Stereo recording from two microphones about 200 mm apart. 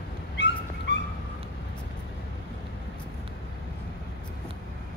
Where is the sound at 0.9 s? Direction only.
60° left (ahead or behind).